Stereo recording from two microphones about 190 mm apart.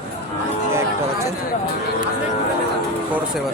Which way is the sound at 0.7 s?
15° right (ahead or behind).